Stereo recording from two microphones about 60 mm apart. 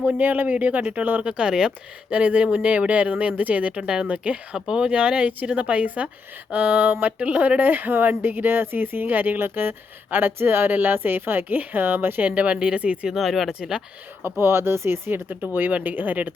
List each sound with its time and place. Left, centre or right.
0.0 s speech: right
1.2 s speech: centre
7.6 s speech: right
12.3 s speech: right
13.1 s speech: centre
13.5 s speech: centre
14.3 s speech: right
15.4 s speech: right